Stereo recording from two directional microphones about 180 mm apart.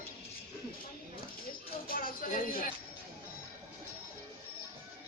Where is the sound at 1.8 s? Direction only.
50° left (ahead or behind).